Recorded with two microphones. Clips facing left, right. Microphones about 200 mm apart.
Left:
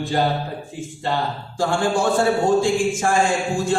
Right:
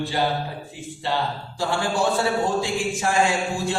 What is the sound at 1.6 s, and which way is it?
A man's voice, 50° left (ahead or behind).